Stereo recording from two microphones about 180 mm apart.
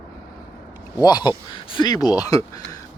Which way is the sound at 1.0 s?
20° left (ahead or behind).